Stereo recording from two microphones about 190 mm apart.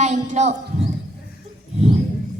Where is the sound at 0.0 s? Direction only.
35° right (ahead or behind).